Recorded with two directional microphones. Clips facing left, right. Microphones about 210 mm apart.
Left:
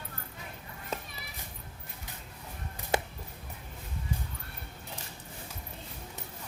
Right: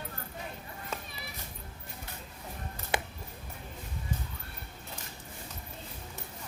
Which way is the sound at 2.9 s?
45° left (ahead or behind).